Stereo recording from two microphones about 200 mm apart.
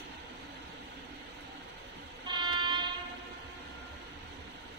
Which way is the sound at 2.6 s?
25° right (ahead or behind).